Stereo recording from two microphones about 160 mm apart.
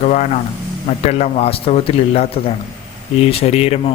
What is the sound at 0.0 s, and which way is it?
A man's voice, 45° left (ahead or behind).